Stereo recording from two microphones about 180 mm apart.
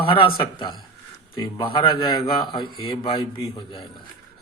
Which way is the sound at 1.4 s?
25° left (ahead or behind).